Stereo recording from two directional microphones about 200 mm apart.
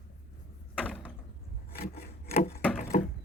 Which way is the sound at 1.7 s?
50° left (ahead or behind).